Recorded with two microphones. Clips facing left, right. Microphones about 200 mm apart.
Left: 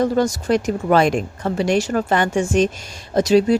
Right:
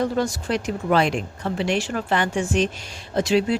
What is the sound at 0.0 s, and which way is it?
Speech, 45° left (ahead or behind).